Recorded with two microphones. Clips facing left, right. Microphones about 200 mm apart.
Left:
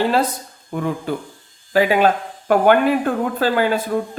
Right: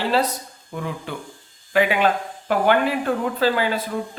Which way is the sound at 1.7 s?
40° left (ahead or behind).